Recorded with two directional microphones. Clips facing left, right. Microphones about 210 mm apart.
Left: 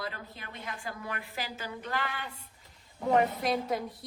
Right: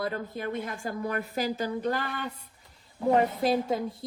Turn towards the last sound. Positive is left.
turn(degrees=-25)  # may be behind; listen again after turning